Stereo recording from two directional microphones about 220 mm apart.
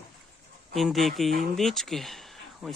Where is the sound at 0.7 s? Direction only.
Centre (ahead or behind).